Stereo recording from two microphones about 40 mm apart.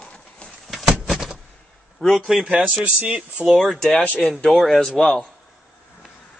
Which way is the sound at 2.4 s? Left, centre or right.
Right.